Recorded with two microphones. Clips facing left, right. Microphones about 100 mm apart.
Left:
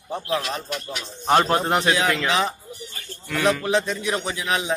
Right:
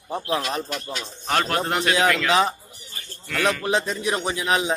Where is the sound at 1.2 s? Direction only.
30° left (ahead or behind).